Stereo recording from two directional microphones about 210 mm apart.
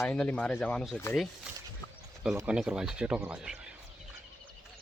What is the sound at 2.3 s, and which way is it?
Speech, 5° right (ahead or behind).